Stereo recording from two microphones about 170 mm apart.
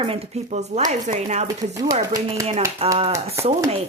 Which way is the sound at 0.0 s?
35° right (ahead or behind).